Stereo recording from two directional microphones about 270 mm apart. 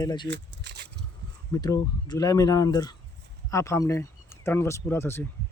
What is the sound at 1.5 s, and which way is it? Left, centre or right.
Speech, centre.